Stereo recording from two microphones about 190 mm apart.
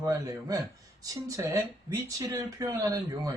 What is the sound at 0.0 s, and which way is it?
Speech, 20° right (ahead or behind).